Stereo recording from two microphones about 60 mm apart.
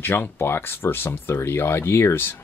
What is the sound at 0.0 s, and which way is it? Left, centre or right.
Speech, left.